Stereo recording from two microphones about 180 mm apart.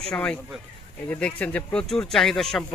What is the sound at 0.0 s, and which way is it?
A man's voice, 5° left (ahead or behind).